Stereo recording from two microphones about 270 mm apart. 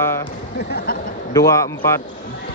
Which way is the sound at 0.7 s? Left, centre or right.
Left.